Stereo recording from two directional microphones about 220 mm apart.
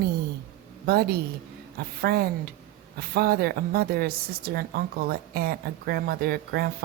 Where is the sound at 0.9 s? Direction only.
45° right (ahead or behind).